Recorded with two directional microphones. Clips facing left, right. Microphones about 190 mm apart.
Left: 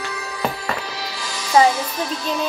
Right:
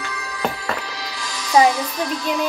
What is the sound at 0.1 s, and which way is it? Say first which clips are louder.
Music: right 1 dB; 25° left (ahead or behind).